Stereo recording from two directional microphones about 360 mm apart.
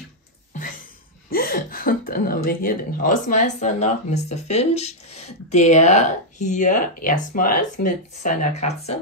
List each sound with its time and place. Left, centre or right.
1.3 s speech: left